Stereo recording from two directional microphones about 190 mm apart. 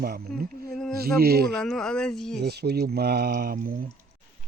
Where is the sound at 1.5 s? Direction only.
5° left (ahead or behind).